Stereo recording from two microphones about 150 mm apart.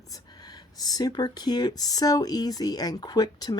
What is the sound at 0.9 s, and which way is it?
Speech, 25° left (ahead or behind).